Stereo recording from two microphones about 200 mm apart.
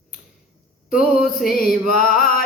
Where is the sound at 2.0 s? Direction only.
45° left (ahead or behind).